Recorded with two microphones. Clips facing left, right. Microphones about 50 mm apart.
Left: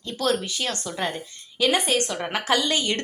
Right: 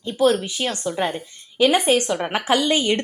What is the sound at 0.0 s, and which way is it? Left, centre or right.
A woman's voice, centre.